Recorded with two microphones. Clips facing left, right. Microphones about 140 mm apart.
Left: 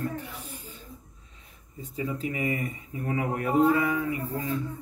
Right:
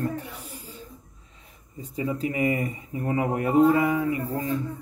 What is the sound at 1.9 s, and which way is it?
Speech, 20° right (ahead or behind).